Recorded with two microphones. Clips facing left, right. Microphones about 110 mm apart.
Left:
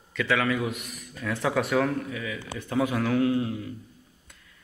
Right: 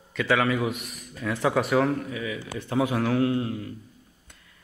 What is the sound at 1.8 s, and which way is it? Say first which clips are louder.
A man's voice: right 2 dB; 15° right (ahead or behind).